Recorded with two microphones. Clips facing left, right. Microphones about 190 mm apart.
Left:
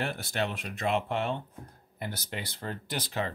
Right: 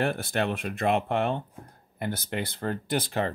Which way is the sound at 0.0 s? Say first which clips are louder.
Right 5 dB; 55° right (ahead or behind).